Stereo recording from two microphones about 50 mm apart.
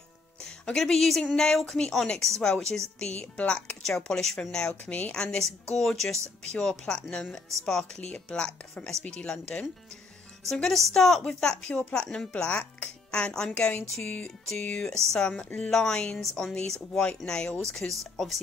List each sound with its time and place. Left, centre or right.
0.4 s speech: centre
3.0 s speech: left
3.8 s speech: centre
8.0 s speech: left
10.4 s speech: centre
12.3 s speech: left
17.6 s speech: centre